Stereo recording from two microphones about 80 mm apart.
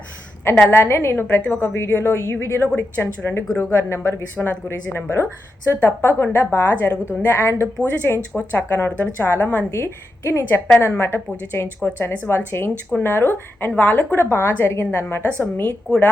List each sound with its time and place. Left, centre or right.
0.7 s a woman's voice: left
4.4 s a woman's voice: left
7.3 s a woman's voice: left
8.3 s a woman's voice: left